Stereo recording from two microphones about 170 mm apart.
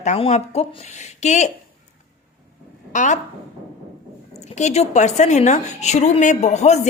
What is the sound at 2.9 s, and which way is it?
Speech, 45° left (ahead or behind).